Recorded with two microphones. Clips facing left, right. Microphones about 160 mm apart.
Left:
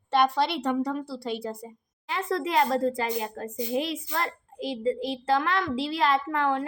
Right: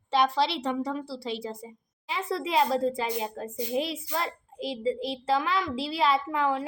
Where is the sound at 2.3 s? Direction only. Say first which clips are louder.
Left 1 dB; 5° right (ahead or behind).